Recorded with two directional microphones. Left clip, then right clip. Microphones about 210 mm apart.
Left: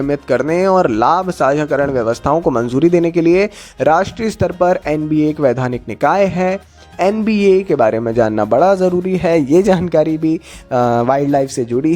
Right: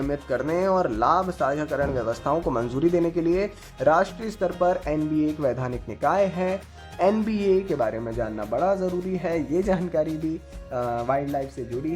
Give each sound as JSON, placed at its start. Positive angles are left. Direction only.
{"t": 0.1, "sound": "speech", "side_deg": 35}